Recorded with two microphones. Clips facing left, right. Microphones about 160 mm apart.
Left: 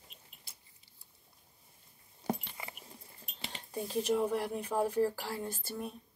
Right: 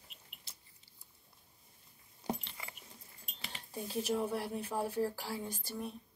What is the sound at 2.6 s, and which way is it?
Dog, 20° left (ahead or behind).